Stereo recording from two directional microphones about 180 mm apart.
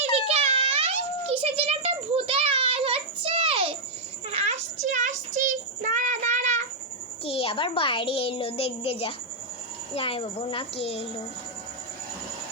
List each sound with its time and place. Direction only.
0.0 s a sound: 35° right (ahead or behind)
5.8 s child singing: 45° right (ahead or behind)
7.3 s a child's voice: 30° left (ahead or behind)